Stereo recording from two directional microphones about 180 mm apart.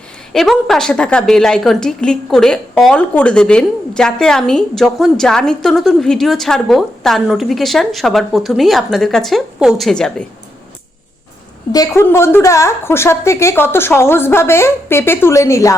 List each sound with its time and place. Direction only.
0.3 s a woman's voice: centre (ahead or behind)
11.7 s a woman's voice: 20° left (ahead or behind)